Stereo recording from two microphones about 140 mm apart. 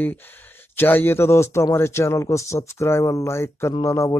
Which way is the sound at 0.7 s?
15° left (ahead or behind).